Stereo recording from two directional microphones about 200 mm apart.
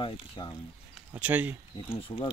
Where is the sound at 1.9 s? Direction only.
25° left (ahead or behind).